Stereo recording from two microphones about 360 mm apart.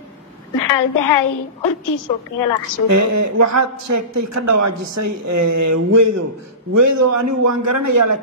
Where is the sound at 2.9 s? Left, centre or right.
Right.